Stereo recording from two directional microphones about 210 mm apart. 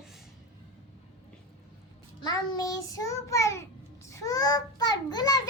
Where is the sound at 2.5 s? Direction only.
15° left (ahead or behind).